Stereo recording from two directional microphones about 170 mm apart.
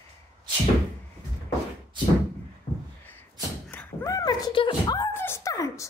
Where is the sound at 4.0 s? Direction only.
20° left (ahead or behind).